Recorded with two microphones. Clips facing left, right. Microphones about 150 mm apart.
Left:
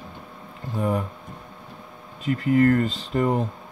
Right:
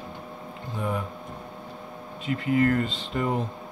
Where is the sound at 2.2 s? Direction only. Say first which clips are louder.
Left 4 dB; 45° left (ahead or behind).